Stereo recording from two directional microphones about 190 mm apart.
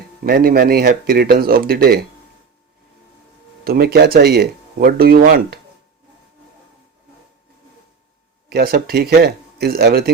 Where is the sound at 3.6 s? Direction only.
55° right (ahead or behind).